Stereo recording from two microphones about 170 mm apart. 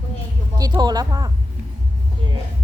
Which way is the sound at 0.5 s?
25° right (ahead or behind).